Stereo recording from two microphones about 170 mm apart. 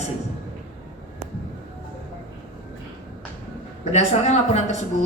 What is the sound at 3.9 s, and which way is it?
Speech, 40° left (ahead or behind).